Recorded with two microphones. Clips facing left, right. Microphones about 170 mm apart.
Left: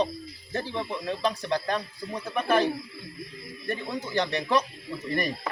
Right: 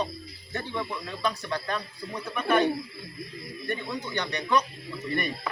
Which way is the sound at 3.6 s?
35° left (ahead or behind).